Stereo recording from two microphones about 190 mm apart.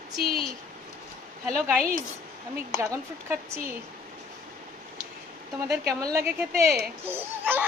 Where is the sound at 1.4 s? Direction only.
Centre (ahead or behind).